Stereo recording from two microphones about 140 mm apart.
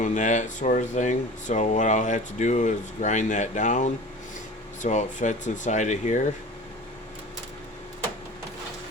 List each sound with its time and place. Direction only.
0.0 s speech: 60° left (ahead or behind)